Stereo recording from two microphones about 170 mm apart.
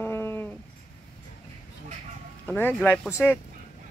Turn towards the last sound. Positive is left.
turn(degrees=10)  # may be behind; listen again after turning